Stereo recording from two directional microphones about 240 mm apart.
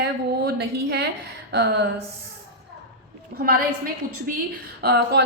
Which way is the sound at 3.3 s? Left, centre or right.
Right.